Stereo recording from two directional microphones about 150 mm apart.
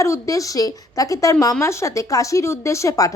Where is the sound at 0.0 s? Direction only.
20° left (ahead or behind).